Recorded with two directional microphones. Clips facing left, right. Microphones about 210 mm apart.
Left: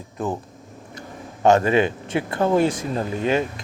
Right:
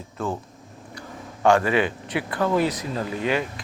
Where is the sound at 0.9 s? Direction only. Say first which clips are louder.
Left 1 dB; 20° left (ahead or behind).